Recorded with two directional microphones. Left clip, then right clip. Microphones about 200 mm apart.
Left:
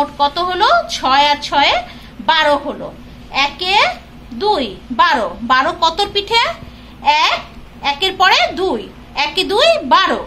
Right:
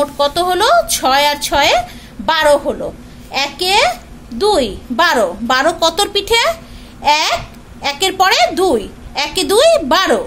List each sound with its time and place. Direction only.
0.0 s a woman's voice: 65° right (ahead or behind)